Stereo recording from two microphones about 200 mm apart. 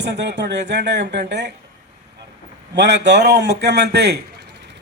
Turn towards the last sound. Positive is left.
turn(degrees=-55)  # may be behind; listen again after turning